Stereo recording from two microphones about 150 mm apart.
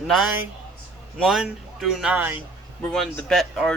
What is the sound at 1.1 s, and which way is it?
Speech, centre (ahead or behind).